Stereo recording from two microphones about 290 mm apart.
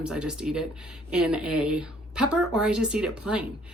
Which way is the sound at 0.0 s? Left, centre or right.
Centre.